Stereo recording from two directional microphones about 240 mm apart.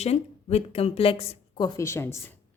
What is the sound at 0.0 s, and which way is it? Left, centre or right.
Speech, left.